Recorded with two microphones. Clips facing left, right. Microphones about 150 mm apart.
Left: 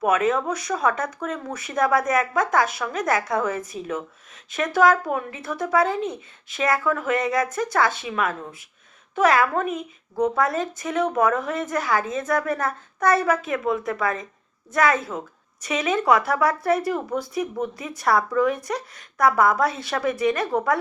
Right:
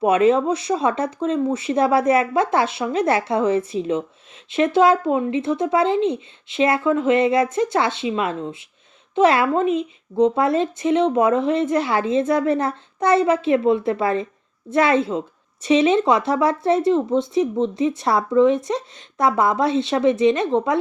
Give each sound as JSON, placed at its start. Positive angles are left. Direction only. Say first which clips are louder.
{"t": 0.0, "sound": "speech", "louder": "right 5 dB", "side_deg": -30}